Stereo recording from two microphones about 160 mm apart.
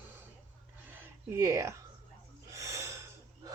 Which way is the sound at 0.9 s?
15° right (ahead or behind).